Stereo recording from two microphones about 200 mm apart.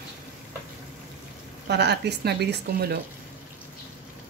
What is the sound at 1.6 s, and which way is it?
Speech, 55° right (ahead or behind).